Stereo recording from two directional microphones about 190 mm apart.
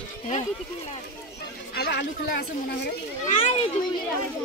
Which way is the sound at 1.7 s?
55° left (ahead or behind).